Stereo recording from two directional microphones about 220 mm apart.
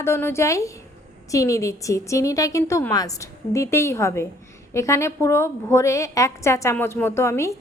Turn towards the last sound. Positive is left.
turn(degrees=15)  # may be behind; listen again after turning